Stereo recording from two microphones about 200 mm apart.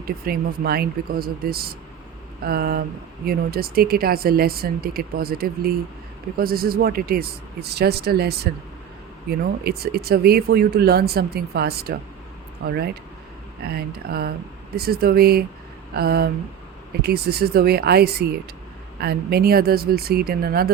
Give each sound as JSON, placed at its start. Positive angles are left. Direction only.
{"t": 0.0, "sound": "speech", "side_deg": -50}
{"t": 9.6, "sound": "speech", "side_deg": -50}
{"t": 13.6, "sound": "speech", "side_deg": -50}